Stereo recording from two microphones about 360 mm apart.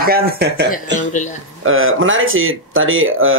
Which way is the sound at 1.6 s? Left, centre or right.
Right.